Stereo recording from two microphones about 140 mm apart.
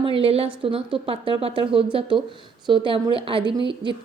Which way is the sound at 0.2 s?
45° right (ahead or behind).